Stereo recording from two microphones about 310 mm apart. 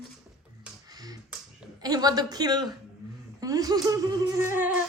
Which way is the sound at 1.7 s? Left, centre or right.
Centre.